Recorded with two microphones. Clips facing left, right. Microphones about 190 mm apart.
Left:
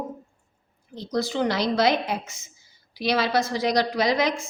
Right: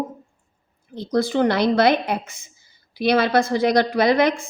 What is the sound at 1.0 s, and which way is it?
A woman's voice, 55° right (ahead or behind).